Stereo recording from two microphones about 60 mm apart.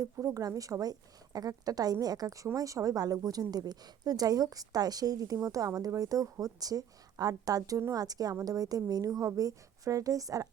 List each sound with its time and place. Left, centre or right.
0.0 s a woman's voice: right